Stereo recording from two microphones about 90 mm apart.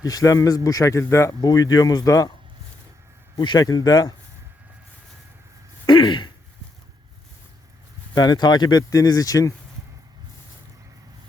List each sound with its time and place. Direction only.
0.0 s speech: 40° left (ahead or behind)
1.4 s speech: 45° left (ahead or behind)
3.3 s speech: 55° left (ahead or behind)
5.8 s throat clearing: 65° left (ahead or behind)
8.1 s speech: 50° left (ahead or behind)